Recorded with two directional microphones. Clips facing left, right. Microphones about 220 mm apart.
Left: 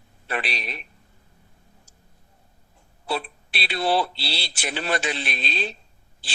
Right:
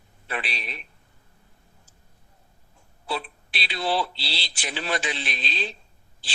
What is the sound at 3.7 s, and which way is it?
Speech, 65° left (ahead or behind).